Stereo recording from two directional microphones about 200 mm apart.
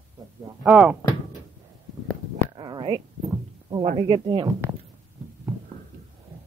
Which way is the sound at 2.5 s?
20° right (ahead or behind).